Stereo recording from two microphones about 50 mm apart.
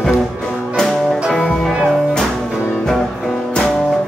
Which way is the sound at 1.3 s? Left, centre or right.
Left.